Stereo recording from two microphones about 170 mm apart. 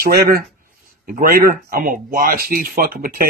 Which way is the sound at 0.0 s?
60° right (ahead or behind).